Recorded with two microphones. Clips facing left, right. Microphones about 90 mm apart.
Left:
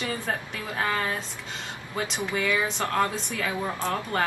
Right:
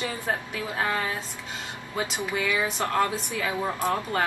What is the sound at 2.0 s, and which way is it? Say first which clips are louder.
Speech: even; 20° right (ahead or behind).